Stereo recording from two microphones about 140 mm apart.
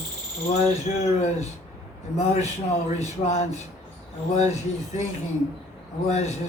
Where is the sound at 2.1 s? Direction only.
50° left (ahead or behind).